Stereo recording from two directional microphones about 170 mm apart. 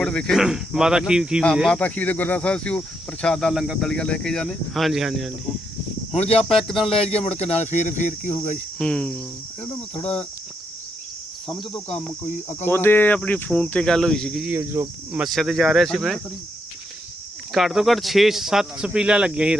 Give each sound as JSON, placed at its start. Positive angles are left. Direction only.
{"t": 0.0, "sound": "speech", "side_deg": 5}
{"t": 6.1, "sound": "speech", "side_deg": 35}
{"t": 8.8, "sound": "cricket", "side_deg": 5}
{"t": 9.9, "sound": "speech", "side_deg": 35}
{"t": 11.5, "sound": "speech", "side_deg": 0}
{"t": 12.6, "sound": "speech", "side_deg": 15}
{"t": 14.5, "sound": "speech", "side_deg": -15}
{"t": 15.2, "sound": "speech", "side_deg": 0}
{"t": 17.5, "sound": "speech", "side_deg": 0}